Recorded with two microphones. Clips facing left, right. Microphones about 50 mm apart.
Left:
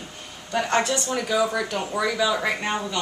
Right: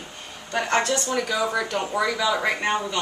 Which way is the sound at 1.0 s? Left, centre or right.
Centre.